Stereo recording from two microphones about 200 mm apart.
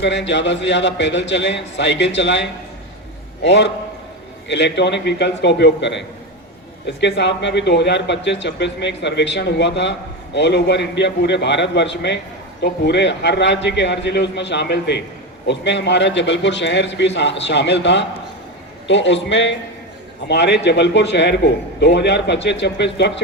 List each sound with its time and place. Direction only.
0.0 s a man's voice: 60° left (ahead or behind)